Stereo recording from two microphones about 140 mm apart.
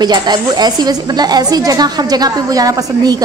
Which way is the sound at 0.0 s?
30° right (ahead or behind).